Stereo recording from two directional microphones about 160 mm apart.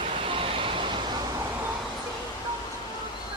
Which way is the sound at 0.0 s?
35° right (ahead or behind).